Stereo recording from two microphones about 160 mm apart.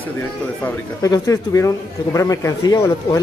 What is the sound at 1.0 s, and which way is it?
A man's voice, 20° left (ahead or behind).